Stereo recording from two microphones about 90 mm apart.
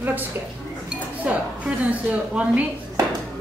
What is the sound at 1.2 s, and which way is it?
A woman's voice, 15° right (ahead or behind).